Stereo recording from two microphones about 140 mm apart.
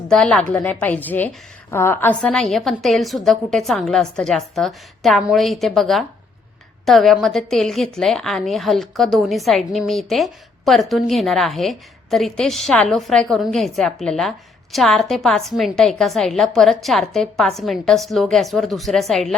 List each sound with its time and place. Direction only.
0.1 s a woman's voice: 5° left (ahead or behind)
2.2 s a woman's voice: centre (ahead or behind)